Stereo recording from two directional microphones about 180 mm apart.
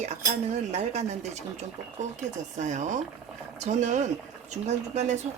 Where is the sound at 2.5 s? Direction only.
40° right (ahead or behind).